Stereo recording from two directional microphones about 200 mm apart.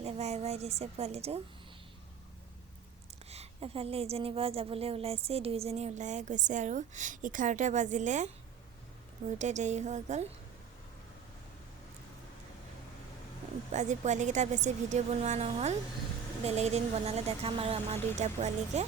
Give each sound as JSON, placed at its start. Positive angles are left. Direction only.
{"t": 0.0, "sound": "a woman's voice", "side_deg": -30}
{"t": 3.2, "sound": "a woman's voice", "side_deg": -30}
{"t": 9.4, "sound": "a woman's voice", "side_deg": -35}
{"t": 13.7, "sound": "a woman's voice", "side_deg": -35}